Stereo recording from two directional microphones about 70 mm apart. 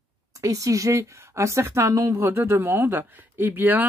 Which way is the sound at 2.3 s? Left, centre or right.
Right.